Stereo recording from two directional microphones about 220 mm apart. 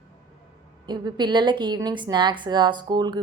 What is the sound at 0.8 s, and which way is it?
A woman's voice, 20° right (ahead or behind).